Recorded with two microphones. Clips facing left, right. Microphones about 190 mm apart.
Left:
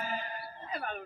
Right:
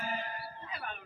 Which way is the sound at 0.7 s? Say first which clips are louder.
Left 8 dB; 45° left (ahead or behind).